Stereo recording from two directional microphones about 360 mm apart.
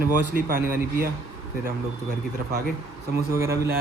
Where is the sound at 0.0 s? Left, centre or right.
Right.